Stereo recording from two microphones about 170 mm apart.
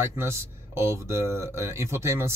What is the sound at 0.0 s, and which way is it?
Speech, 15° right (ahead or behind).